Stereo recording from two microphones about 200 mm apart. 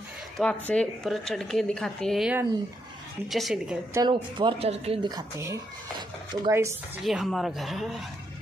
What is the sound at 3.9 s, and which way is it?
Speech, 25° right (ahead or behind).